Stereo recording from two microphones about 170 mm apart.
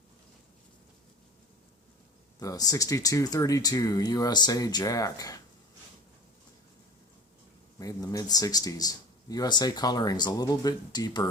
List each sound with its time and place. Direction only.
2.4 s speech: 20° left (ahead or behind)
7.8 s speech: 20° left (ahead or behind)